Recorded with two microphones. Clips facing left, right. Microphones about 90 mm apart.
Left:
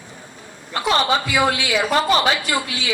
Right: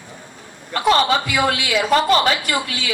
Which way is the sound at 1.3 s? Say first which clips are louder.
Even; 50° right (ahead or behind).